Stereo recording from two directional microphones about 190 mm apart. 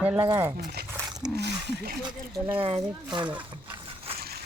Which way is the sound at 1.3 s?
60° right (ahead or behind).